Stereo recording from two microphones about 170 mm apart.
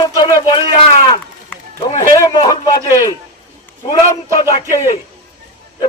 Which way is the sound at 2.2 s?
25° left (ahead or behind).